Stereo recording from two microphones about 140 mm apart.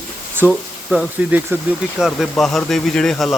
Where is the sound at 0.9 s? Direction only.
10° right (ahead or behind).